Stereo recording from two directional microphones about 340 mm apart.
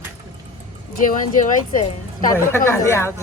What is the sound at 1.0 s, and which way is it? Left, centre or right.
Speech, left.